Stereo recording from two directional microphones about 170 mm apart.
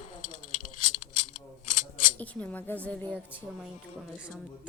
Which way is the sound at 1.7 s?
45° left (ahead or behind).